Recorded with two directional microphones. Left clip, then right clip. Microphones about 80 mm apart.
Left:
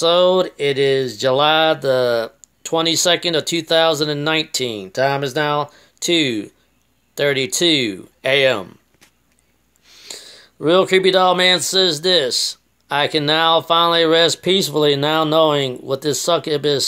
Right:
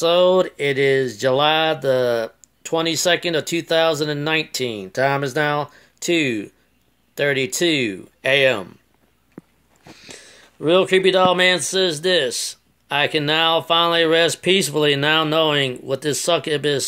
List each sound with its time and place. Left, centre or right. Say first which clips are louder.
0.0 s speech: left 1 dB; centre
9.9 s speech: left 6 dB; centre